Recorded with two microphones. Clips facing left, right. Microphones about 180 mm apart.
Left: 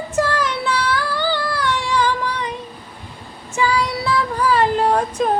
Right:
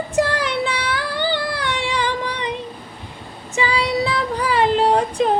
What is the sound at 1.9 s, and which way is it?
Female singing, 15° right (ahead or behind).